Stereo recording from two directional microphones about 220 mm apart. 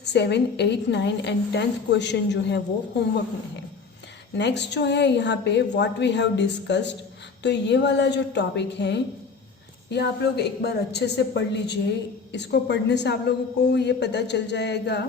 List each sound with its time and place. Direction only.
0.0 s a woman's voice: 50° left (ahead or behind)
4.4 s a woman's voice: 50° left (ahead or behind)